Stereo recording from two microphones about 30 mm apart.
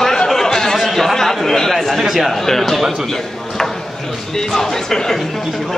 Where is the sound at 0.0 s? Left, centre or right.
Centre.